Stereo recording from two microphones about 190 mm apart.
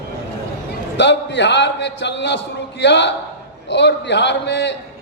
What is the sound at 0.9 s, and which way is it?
A man's voice, 65° left (ahead or behind).